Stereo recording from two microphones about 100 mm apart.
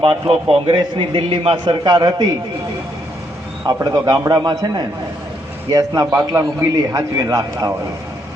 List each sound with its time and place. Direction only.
0.0 s a man's voice: 60° right (ahead or behind)
3.8 s a man's voice: 40° right (ahead or behind)
6.1 s a man's voice: 30° right (ahead or behind)